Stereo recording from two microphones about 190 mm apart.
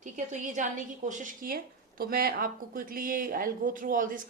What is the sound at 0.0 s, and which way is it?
A woman's voice, 40° right (ahead or behind).